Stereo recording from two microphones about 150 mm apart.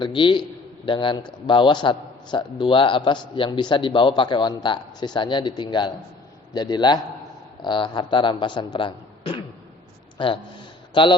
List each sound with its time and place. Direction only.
0.0 s a man's voice: 30° left (ahead or behind)